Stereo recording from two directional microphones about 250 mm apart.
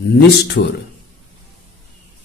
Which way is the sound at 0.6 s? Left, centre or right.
Left.